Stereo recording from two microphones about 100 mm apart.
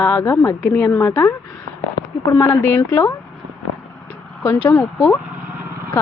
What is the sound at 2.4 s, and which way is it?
Speech, 25° left (ahead or behind).